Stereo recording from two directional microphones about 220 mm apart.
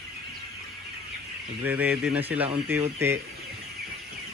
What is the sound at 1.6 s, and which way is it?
Speech, 5° right (ahead or behind).